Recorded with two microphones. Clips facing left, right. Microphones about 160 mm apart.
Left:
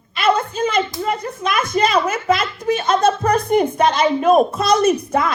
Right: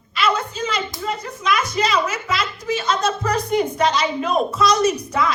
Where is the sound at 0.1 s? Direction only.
55° left (ahead or behind).